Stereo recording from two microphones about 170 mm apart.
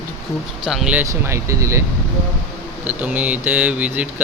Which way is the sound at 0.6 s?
5° right (ahead or behind).